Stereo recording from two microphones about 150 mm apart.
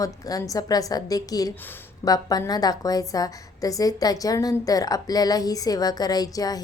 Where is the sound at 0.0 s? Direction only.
25° left (ahead or behind).